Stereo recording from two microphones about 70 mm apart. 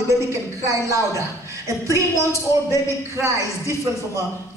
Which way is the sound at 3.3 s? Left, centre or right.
Right.